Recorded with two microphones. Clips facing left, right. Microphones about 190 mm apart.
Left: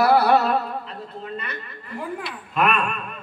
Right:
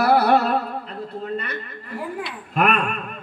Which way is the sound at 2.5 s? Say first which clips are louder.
Right 1 dB; 45° right (ahead or behind).